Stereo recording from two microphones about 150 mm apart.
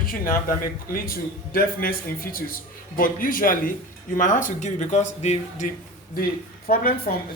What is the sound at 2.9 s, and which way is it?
Speech, 70° left (ahead or behind).